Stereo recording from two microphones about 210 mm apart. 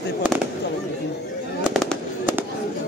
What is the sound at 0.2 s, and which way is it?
Fireworks, 5° right (ahead or behind).